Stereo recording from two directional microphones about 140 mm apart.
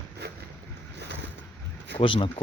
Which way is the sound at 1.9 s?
40° left (ahead or behind).